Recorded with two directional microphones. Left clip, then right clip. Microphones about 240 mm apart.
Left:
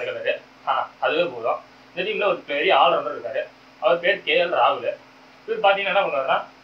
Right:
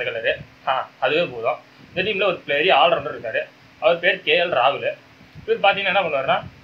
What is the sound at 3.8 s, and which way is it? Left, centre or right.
A man's voice, right.